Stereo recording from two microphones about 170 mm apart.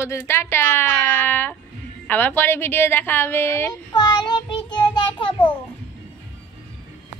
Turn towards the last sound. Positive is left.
turn(degrees=30)  # may be behind; listen again after turning